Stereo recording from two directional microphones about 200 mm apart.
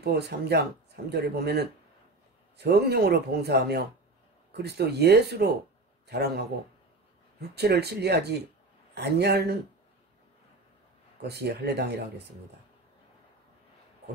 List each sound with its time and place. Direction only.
0.0 s speech: 55° right (ahead or behind)
7.5 s speech: 55° right (ahead or behind)
11.2 s speech: 55° right (ahead or behind)